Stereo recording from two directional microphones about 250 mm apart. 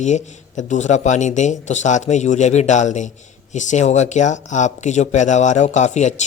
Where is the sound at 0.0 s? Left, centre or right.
Left.